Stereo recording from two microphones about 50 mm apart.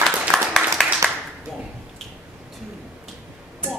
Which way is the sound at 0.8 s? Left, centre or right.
Centre.